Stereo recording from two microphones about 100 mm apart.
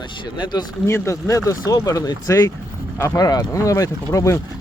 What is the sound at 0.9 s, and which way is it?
Speech, 30° left (ahead or behind).